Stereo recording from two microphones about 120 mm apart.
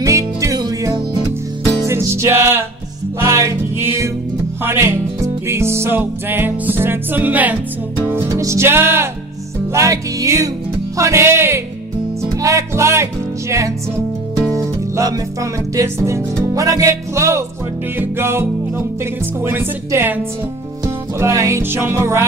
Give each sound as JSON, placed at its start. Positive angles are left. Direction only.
{"t": 0.0, "sound": "music", "side_deg": -25}
{"t": 8.0, "sound": "speech", "side_deg": -30}
{"t": 12.4, "sound": "music", "side_deg": -25}
{"t": 15.7, "sound": "speech", "side_deg": -25}
{"t": 19.4, "sound": "music", "side_deg": -20}